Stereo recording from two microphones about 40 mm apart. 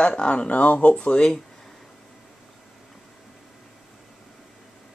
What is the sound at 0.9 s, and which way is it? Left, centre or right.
Speech, left.